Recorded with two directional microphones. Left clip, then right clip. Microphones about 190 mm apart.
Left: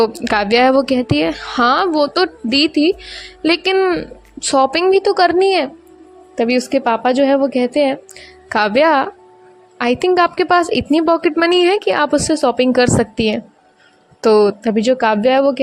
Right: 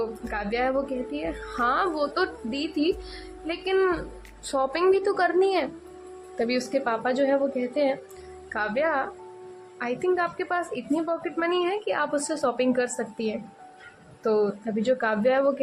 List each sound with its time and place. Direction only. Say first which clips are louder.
0.0 s a woman's voice: left 15 dB; 50° left (ahead or behind)